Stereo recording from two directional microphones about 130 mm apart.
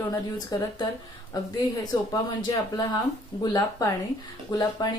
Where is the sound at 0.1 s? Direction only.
30° left (ahead or behind).